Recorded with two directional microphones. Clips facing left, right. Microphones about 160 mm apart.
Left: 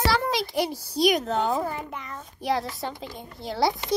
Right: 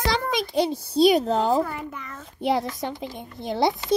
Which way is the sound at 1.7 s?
25° left (ahead or behind).